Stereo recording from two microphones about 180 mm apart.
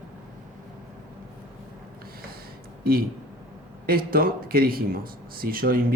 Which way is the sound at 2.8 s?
55° right (ahead or behind).